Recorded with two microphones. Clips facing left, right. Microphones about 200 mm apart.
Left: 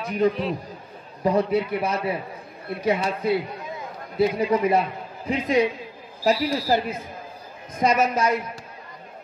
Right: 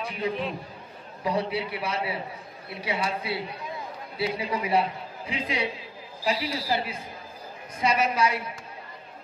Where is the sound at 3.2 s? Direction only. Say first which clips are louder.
Left 8 dB; 45° left (ahead or behind).